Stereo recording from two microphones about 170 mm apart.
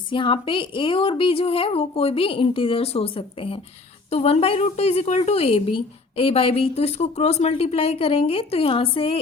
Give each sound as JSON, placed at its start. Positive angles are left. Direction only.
{"t": 0.1, "sound": "a woman's voice", "side_deg": 30}